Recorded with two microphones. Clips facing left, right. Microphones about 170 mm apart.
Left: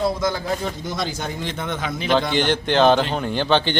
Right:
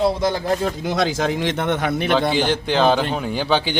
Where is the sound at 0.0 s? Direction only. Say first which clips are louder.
Right 3 dB; 30° right (ahead or behind).